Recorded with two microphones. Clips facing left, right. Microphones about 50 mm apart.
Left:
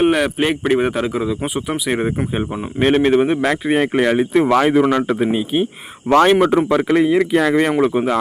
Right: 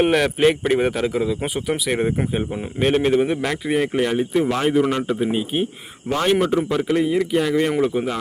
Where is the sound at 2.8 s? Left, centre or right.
Left.